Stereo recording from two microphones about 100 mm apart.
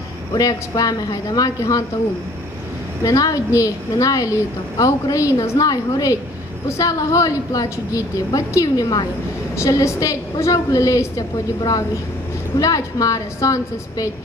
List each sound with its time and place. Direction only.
0.3 s a woman's voice: 40° left (ahead or behind)
3.0 s a woman's voice: 35° left (ahead or behind)